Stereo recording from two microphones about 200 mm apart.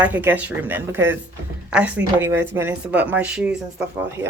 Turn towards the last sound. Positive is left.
turn(degrees=-10)  # may be behind; listen again after turning